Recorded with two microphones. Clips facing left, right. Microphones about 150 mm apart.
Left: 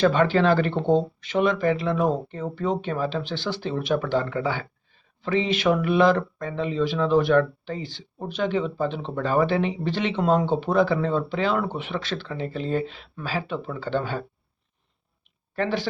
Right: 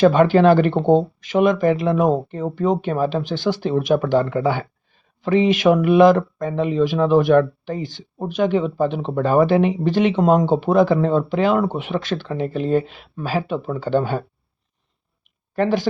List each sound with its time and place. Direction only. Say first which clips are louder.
0.0 s speech: right 6 dB; 45° right (ahead or behind)
15.5 s speech: right 6 dB; 45° right (ahead or behind)